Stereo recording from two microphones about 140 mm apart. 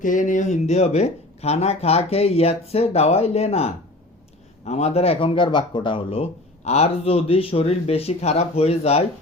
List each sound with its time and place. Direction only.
0.0 s speech: 65° left (ahead or behind); by 9.0 s 50° left (ahead or behind)